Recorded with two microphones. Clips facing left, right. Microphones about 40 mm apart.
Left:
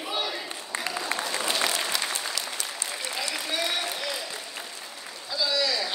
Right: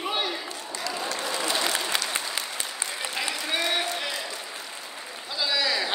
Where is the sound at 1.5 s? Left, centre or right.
Right.